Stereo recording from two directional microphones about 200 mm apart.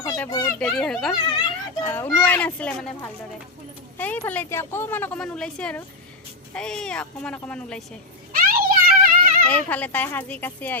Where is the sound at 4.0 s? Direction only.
10° left (ahead or behind).